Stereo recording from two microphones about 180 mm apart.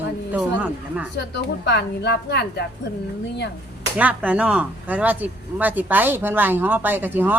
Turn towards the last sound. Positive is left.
turn(degrees=-10)  # may be behind; listen again after turning